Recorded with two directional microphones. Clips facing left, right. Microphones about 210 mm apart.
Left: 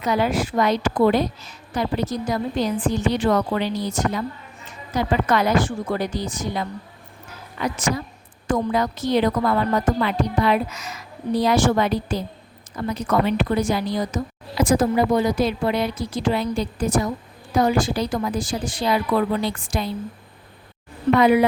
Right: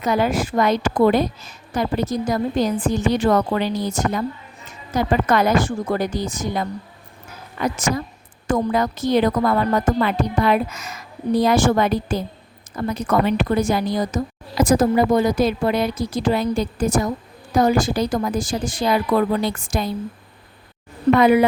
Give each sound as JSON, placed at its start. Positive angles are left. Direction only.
{"t": 0.0, "sound": "a woman's voice", "side_deg": -50}
{"t": 21.2, "sound": "a woman's voice", "side_deg": -50}